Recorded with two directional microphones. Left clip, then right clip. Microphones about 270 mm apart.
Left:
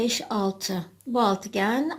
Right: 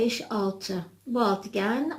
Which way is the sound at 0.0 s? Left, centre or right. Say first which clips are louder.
Left 1 dB; left.